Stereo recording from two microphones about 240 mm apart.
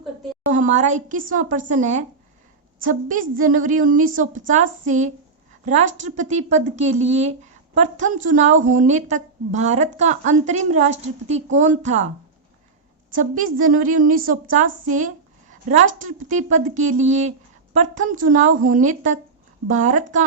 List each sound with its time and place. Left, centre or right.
0.5 s a woman's voice: right
13.1 s a woman's voice: right